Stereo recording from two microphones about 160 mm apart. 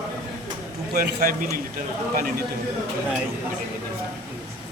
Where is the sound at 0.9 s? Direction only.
65° right (ahead or behind).